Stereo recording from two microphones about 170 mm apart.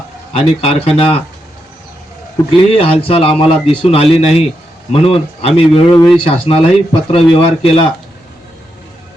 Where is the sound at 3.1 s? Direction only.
35° left (ahead or behind).